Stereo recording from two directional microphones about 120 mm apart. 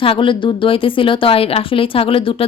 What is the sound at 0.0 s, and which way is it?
A woman's voice, 45° left (ahead or behind).